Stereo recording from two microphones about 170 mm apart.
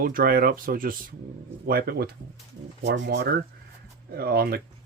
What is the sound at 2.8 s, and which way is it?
Speech, 90° right.